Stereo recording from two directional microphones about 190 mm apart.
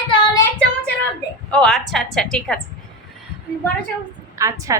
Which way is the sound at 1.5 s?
5° left (ahead or behind).